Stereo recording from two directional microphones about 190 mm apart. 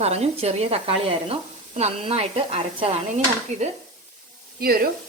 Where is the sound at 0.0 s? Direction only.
35° right (ahead or behind).